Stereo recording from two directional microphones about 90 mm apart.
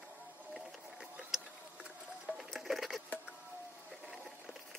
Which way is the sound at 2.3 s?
Centre (ahead or behind).